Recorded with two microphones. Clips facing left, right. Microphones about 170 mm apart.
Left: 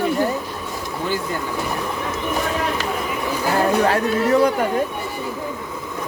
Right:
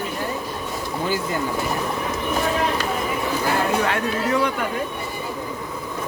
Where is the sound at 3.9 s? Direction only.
40° left (ahead or behind).